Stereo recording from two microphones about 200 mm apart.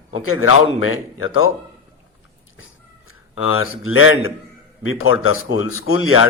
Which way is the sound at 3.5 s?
90° left.